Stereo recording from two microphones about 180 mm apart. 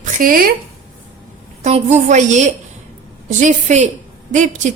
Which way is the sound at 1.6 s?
40° right (ahead or behind).